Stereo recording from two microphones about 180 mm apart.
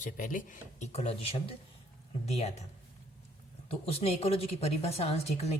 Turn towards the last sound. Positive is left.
turn(degrees=35)  # may be behind; listen again after turning